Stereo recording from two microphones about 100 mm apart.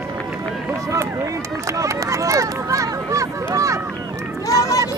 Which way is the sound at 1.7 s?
30° right (ahead or behind).